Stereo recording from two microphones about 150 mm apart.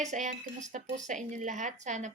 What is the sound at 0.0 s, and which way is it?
Speech, 55° right (ahead or behind).